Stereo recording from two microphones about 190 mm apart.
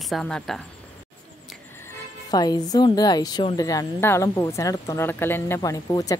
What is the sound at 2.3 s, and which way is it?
Speech, 20° left (ahead or behind).